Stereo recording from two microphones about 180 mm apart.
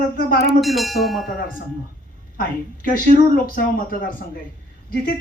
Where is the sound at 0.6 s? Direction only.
Centre (ahead or behind).